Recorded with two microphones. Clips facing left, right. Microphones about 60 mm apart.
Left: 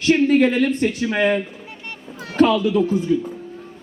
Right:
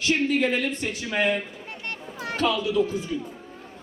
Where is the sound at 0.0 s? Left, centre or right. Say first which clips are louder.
Left 8 dB; left.